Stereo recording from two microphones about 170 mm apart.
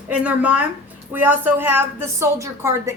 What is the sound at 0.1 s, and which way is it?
A woman's voice, 10° right (ahead or behind).